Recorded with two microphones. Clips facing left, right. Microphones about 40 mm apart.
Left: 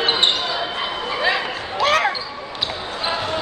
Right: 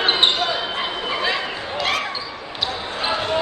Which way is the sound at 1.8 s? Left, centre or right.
Left.